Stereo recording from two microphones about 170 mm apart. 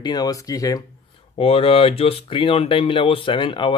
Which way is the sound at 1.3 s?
35° left (ahead or behind).